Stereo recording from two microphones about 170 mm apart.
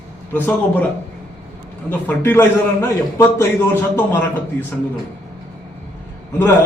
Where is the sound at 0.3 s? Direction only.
10° left (ahead or behind).